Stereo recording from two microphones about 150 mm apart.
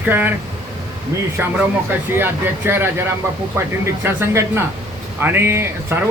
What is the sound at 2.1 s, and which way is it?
Speech, 15° right (ahead or behind).